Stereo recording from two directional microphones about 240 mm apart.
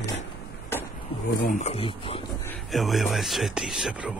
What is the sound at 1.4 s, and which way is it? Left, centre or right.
Speech, left.